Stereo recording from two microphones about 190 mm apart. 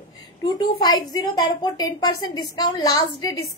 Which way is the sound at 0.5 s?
20° left (ahead or behind).